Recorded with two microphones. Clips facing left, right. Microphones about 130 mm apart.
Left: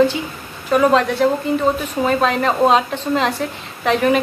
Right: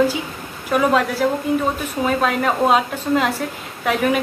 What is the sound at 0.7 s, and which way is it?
A woman's voice, 5° right (ahead or behind).